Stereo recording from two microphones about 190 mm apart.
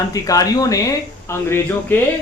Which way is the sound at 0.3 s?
20° left (ahead or behind).